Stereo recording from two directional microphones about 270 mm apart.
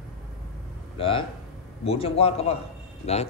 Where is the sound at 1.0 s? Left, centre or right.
Centre.